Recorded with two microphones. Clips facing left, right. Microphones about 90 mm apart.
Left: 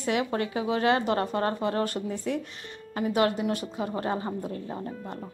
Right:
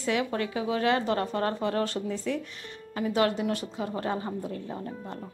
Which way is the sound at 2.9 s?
25° left (ahead or behind).